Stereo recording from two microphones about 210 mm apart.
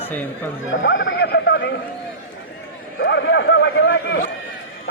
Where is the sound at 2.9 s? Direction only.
55° left (ahead or behind).